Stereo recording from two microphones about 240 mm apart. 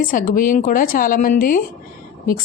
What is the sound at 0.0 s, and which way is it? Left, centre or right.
A woman's voice, left.